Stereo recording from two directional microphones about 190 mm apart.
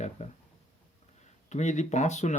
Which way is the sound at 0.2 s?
35° left (ahead or behind).